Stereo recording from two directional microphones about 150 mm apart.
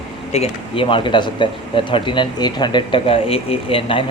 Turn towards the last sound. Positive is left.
turn(degrees=35)  # may be behind; listen again after turning